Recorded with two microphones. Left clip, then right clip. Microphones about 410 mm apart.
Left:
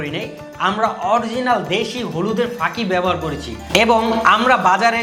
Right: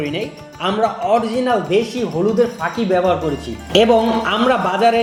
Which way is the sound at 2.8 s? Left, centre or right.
Left.